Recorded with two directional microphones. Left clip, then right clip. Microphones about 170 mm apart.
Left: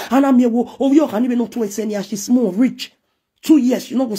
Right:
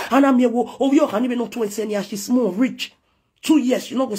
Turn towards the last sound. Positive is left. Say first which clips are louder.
# left 2 dB
turn(degrees=45)  # may be behind; listen again after turning